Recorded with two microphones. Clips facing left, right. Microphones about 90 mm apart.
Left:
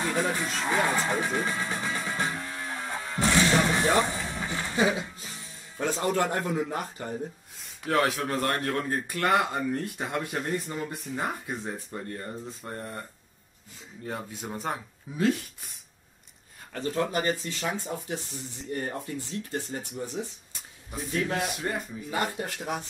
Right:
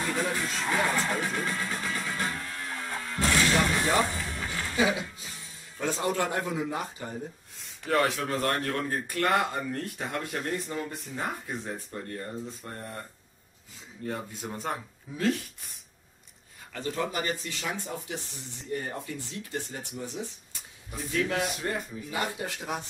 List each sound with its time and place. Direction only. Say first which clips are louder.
0.1 s speech: left 2 dB; centre (ahead or behind)
0.7 s music: left 2 dB; centre (ahead or behind)
5.8 s a man's voice: left 2 dB; centre (ahead or behind)
14.0 s a man's voice: right 1 dB; 5° left (ahead or behind)
16.7 s a man's voice: left 3 dB; centre (ahead or behind)
21.4 s a man's voice: even; centre (ahead or behind)